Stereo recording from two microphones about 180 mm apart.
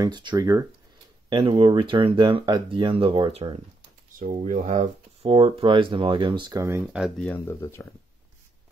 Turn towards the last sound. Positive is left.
turn(degrees=15)  # may be behind; listen again after turning